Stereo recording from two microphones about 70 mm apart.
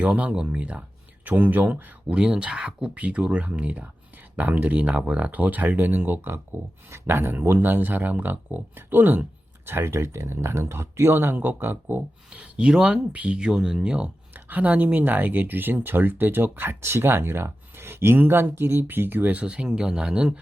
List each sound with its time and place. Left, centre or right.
0.0 s speech: centre
12.3 s speech: centre
13.1 s speech: right
13.4 s speech: centre
14.3 s speech: right